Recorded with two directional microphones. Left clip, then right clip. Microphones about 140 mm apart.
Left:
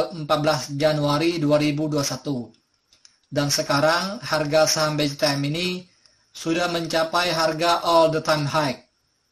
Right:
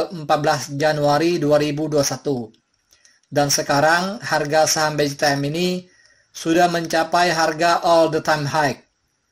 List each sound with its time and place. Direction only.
0.0 s speech: 40° right (ahead or behind)